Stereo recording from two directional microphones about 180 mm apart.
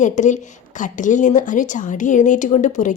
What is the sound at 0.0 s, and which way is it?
A woman's voice, 45° left (ahead or behind).